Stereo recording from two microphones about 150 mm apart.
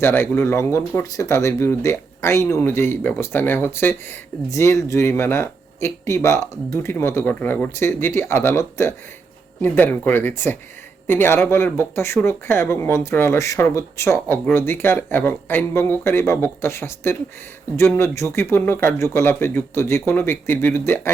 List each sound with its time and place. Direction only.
0.0 s speech: 15° left (ahead or behind)